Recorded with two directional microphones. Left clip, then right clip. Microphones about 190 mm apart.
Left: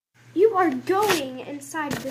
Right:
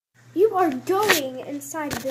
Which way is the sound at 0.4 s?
30° right (ahead or behind).